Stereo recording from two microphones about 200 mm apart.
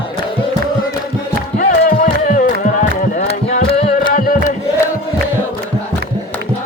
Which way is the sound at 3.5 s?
30° left (ahead or behind).